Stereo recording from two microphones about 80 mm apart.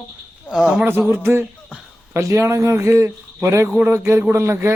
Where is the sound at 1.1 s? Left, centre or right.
Right.